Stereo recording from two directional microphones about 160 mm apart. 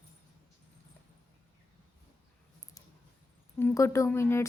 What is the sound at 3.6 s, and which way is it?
Speech, 15° left (ahead or behind).